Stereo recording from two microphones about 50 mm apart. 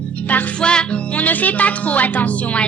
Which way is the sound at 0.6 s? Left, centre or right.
Centre.